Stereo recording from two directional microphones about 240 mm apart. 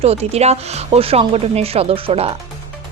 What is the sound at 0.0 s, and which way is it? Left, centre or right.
A woman's voice, right.